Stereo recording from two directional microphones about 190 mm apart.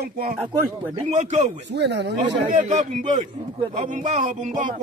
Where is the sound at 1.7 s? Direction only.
65° right (ahead or behind).